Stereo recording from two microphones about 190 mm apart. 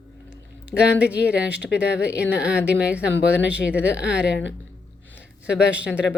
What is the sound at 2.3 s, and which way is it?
Speech, 5° right (ahead or behind).